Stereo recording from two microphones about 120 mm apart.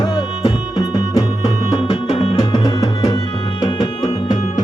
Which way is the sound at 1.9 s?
60° left (ahead or behind).